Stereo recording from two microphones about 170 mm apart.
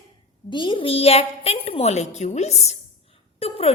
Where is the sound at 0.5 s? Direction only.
30° left (ahead or behind).